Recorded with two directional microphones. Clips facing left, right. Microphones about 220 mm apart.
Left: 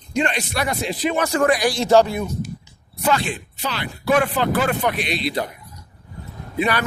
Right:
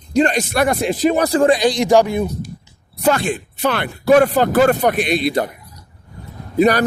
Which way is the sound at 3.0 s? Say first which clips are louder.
Right 4 dB; 45° right (ahead or behind).